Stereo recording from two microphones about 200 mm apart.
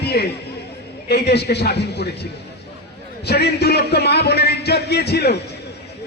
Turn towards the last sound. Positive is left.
turn(degrees=55)  # may be behind; listen again after turning